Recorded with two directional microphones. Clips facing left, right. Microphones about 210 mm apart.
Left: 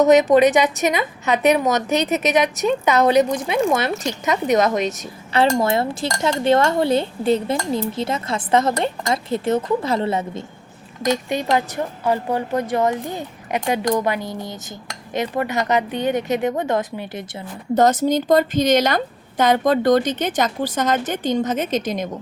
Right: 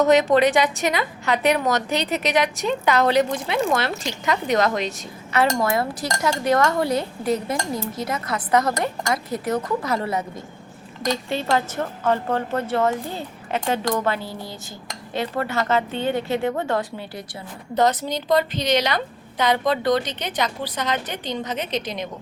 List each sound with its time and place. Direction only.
0.0 s speech: 20° left (ahead or behind)
17.7 s a woman's voice: 45° left (ahead or behind)